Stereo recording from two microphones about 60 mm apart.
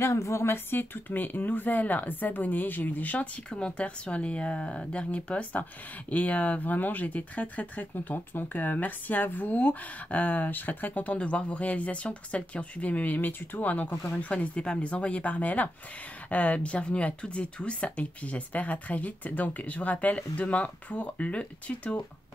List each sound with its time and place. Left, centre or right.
0.0 s a woman's voice: left